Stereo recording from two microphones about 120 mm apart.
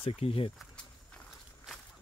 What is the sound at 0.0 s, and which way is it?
Speech, 55° left (ahead or behind).